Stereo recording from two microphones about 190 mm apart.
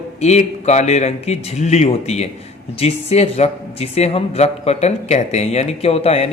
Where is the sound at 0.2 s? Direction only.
35° left (ahead or behind).